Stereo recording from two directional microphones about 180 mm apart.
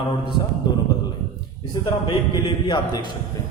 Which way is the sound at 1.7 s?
25° left (ahead or behind).